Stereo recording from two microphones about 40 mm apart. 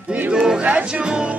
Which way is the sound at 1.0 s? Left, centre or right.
Right.